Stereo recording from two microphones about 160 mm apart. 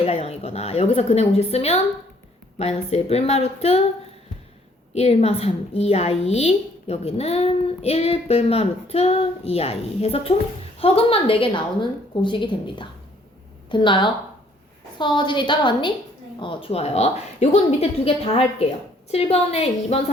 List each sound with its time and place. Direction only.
0.0 s a woman's voice: 40° left (ahead or behind)
4.9 s a woman's voice: 40° left (ahead or behind)